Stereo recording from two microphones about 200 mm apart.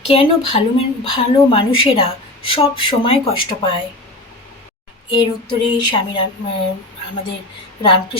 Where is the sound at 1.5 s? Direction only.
25° left (ahead or behind).